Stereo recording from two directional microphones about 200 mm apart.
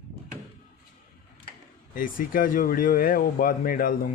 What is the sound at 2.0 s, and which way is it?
Speech, 45° left (ahead or behind).